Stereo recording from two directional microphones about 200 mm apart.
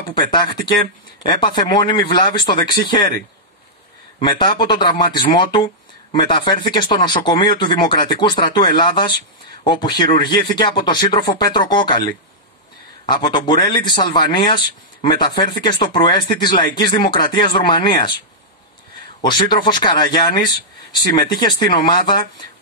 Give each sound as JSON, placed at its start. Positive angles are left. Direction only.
{"t": 0.1, "sound": "speech", "side_deg": 25}
{"t": 4.2, "sound": "speech", "side_deg": 25}
{"t": 13.1, "sound": "speech", "side_deg": 25}
{"t": 19.2, "sound": "speech", "side_deg": 25}
{"t": 21.4, "sound": "speech", "side_deg": 20}